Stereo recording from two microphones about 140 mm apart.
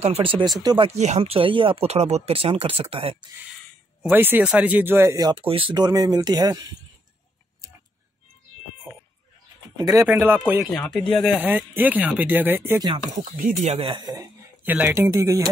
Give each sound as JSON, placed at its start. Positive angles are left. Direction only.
{"t": 0.0, "sound": "speech", "side_deg": -40}
{"t": 0.8, "sound": "speech", "side_deg": -55}
{"t": 4.1, "sound": "speech", "side_deg": -15}
{"t": 5.4, "sound": "speech", "side_deg": -40}
{"t": 9.8, "sound": "speech", "side_deg": -25}
{"t": 10.0, "sound": "speech", "side_deg": -15}
{"t": 10.9, "sound": "speech", "side_deg": 0}
{"t": 11.3, "sound": "speech", "side_deg": -10}
{"t": 13.7, "sound": "speech", "side_deg": -40}
{"t": 14.6, "sound": "speech", "side_deg": -15}